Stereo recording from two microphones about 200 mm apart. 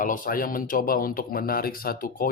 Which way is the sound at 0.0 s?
45° left (ahead or behind).